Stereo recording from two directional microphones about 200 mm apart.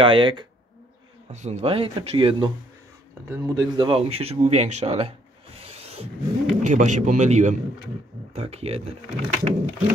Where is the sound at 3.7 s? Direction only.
25° right (ahead or behind).